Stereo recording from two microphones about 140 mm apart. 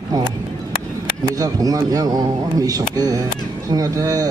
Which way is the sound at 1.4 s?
25° right (ahead or behind).